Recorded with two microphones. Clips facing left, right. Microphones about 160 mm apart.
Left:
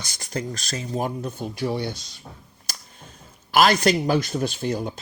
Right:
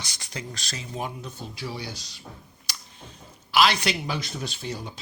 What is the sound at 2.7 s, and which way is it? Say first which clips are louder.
Finger snapping: left 2 dB; 45° left (ahead or behind).